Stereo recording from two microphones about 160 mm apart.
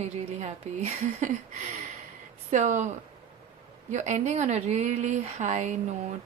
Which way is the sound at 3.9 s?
50° right (ahead or behind).